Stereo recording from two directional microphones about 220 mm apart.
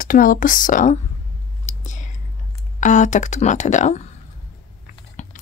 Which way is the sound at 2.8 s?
35° left (ahead or behind).